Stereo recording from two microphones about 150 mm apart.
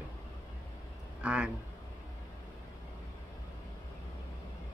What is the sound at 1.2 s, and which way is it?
Speech, 5° right (ahead or behind).